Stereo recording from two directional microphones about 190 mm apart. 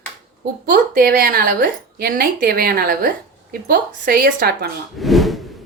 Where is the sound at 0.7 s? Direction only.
50° right (ahead or behind).